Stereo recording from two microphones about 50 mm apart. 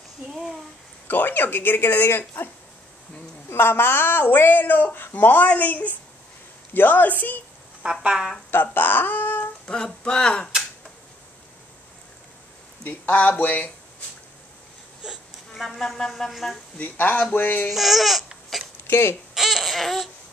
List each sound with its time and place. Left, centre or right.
0.3 s a sound: centre
1.0 s a man's voice: left
7.8 s speech: centre
8.5 s speech: left
9.7 s speech: centre
12.8 s a man's voice: left
15.5 s speech: centre
16.7 s a man's voice: left
17.7 s speech: centre
18.9 s speech: left
19.3 s babbling: centre